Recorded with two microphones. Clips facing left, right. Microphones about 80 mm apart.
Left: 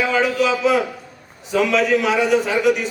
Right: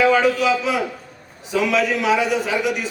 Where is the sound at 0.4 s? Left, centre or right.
Centre.